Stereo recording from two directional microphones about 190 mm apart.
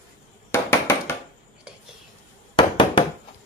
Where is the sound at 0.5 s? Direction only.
10° left (ahead or behind).